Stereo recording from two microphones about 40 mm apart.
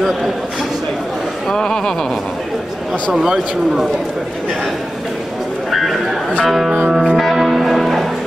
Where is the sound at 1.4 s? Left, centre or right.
Centre.